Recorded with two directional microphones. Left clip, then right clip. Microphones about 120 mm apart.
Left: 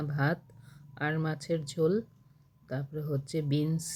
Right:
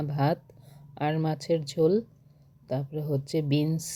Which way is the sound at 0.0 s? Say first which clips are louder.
Right 4 dB; 30° right (ahead or behind).